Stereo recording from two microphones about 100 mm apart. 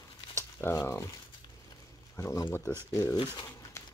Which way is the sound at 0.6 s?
30° left (ahead or behind).